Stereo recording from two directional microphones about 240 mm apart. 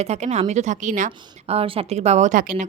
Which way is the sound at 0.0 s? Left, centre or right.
Right.